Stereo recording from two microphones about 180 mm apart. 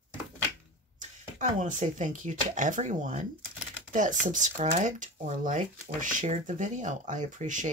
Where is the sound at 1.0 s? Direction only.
40° right (ahead or behind).